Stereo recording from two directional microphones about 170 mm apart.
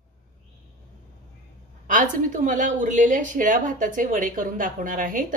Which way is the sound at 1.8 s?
50° right (ahead or behind).